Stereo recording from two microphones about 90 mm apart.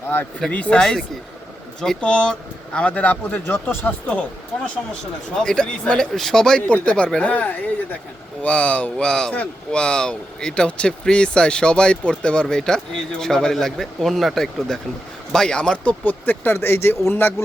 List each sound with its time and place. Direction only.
0.5 s speech: 10° left (ahead or behind)
5.3 s speech: 5° left (ahead or behind); by 17.3 s 25° left (ahead or behind)